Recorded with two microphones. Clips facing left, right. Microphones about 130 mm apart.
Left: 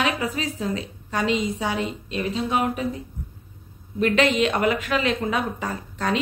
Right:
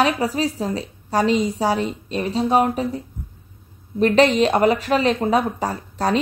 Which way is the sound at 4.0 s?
35° right (ahead or behind).